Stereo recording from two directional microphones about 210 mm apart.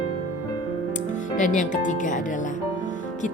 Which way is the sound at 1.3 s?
35° left (ahead or behind).